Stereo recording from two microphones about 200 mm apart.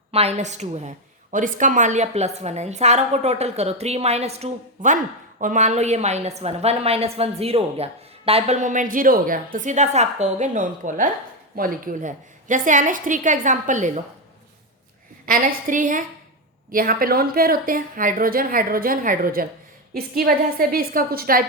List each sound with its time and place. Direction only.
0.1 s a woman's voice: 30° right (ahead or behind)
15.3 s a woman's voice: 45° right (ahead or behind)